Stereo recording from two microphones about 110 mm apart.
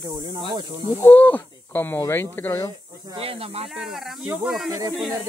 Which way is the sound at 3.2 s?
60° right (ahead or behind).